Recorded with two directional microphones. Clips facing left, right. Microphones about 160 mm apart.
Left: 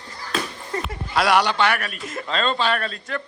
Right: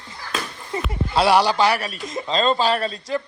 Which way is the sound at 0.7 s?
10° right (ahead or behind).